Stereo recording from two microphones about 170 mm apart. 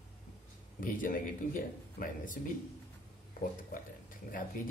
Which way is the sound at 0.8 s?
55° left (ahead or behind).